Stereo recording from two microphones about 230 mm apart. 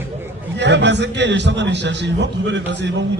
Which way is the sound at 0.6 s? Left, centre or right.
Right.